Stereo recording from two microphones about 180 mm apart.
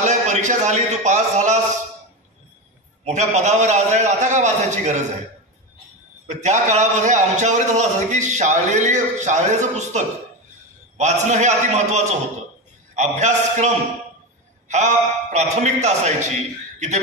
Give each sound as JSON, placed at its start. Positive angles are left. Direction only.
{"t": 0.0, "sound": "a man's voice", "side_deg": -40}
{"t": 3.1, "sound": "a man's voice", "side_deg": -40}
{"t": 6.2, "sound": "a man's voice", "side_deg": -40}